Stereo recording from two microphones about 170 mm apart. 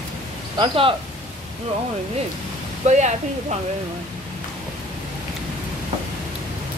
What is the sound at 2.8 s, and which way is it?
Speech, 45° right (ahead or behind).